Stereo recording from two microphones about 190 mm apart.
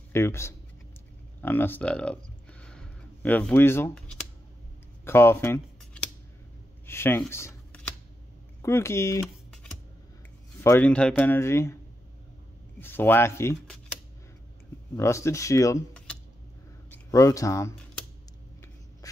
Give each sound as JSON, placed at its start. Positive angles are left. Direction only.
{"t": 0.1, "sound": "speech", "side_deg": 15}
{"t": 2.6, "sound": "a sound", "side_deg": 5}
{"t": 5.0, "sound": "speech", "side_deg": 15}
{"t": 6.9, "sound": "speech", "side_deg": 10}
{"t": 10.6, "sound": "speech", "side_deg": 10}
{"t": 12.8, "sound": "speech", "side_deg": 10}
{"t": 15.0, "sound": "speech", "side_deg": 15}
{"t": 16.9, "sound": "speech", "side_deg": 15}